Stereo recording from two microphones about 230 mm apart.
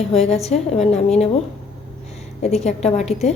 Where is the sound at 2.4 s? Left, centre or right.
Left.